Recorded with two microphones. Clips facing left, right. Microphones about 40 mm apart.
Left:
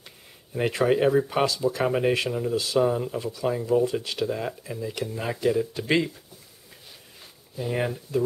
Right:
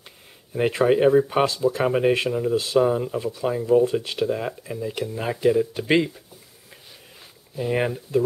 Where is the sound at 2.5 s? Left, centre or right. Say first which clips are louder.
Right 3 dB; centre.